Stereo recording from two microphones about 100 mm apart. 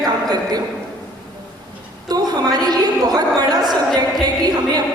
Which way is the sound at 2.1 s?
40° right (ahead or behind).